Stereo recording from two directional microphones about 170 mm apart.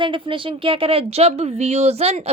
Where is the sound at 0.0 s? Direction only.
30° right (ahead or behind).